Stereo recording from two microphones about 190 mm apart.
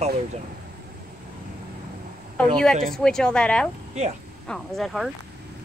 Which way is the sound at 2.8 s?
5° left (ahead or behind).